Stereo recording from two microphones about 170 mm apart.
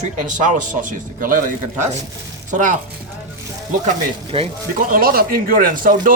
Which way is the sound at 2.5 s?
45° right (ahead or behind).